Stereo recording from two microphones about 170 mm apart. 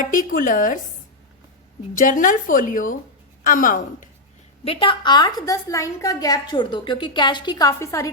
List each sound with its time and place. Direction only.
0.0 s a woman's voice: 50° left (ahead or behind)
2.0 s a woman's voice: 50° left (ahead or behind)
4.6 s a woman's voice: 35° left (ahead or behind); by 8.1 s 20° left (ahead or behind)